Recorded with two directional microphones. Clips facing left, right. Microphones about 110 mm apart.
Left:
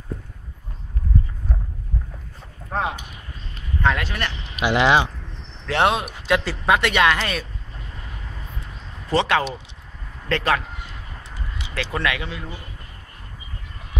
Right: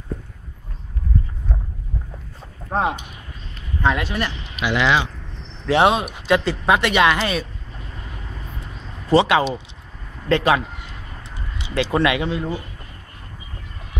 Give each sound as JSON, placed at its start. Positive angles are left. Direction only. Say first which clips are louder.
{"t": 2.7, "sound": "speech", "louder": "right 4 dB", "side_deg": -30}
{"t": 3.8, "sound": "speech", "louder": "right 2 dB", "side_deg": -15}
{"t": 4.6, "sound": "speech", "louder": "left 2 dB", "side_deg": 35}
{"t": 5.7, "sound": "speech", "louder": "right 4 dB", "side_deg": -5}
{"t": 9.1, "sound": "speech", "louder": "right 4 dB", "side_deg": -10}